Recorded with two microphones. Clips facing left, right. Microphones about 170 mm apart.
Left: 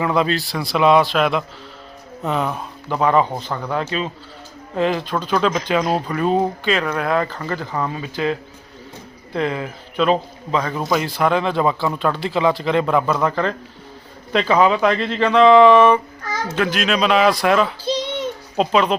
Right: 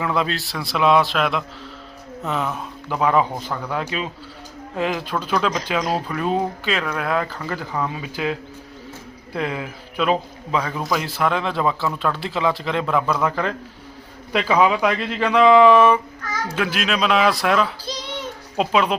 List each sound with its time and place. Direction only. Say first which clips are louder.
0.0 s speech: left 4 dB; centre (ahead or behind)
17.8 s a sound: left 8 dB; 30° left (ahead or behind)
18.5 s speech: left 2 dB; 5° right (ahead or behind)